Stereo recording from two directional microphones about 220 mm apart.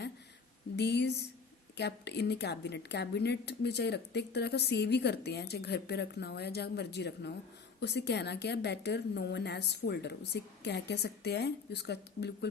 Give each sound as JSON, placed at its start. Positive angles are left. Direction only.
{"t": 0.8, "sound": "a woman's voice", "side_deg": 50}